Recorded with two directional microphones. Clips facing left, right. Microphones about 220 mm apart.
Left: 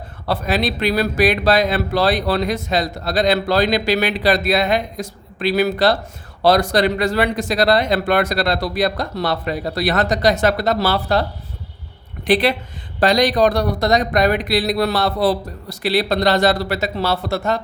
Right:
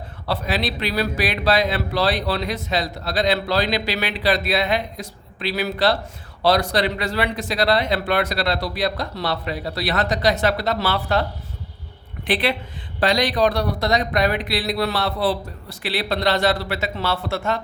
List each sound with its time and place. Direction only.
0.3 s speech: 50° left (ahead or behind)